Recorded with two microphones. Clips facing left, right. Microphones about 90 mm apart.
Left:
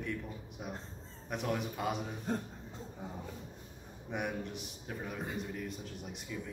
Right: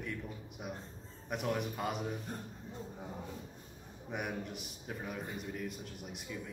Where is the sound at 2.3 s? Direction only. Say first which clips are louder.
Left 8 dB; 90° left.